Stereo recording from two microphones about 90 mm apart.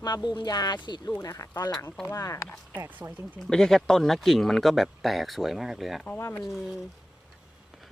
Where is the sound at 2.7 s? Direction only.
20° right (ahead or behind).